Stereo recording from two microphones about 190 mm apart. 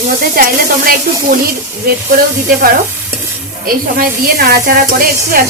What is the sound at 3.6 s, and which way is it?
Speech, 50° right (ahead or behind).